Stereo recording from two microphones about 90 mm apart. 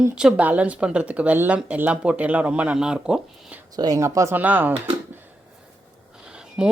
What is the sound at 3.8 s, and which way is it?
Speech, 40° right (ahead or behind).